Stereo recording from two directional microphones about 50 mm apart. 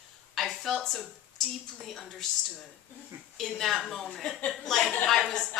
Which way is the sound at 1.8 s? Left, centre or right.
Centre.